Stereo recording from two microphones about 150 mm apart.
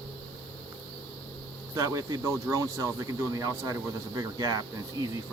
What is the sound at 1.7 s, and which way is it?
Speech, 20° right (ahead or behind).